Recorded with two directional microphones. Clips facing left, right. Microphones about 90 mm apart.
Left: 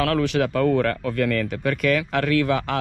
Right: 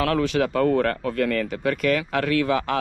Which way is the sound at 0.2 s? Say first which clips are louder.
Even; 25° right (ahead or behind).